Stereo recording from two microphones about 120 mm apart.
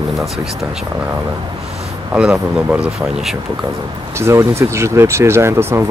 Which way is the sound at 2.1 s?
10° right (ahead or behind).